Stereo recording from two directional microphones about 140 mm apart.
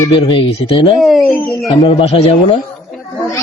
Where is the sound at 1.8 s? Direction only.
50° left (ahead or behind).